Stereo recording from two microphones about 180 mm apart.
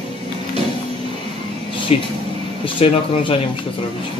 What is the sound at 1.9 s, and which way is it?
Speech, 35° left (ahead or behind).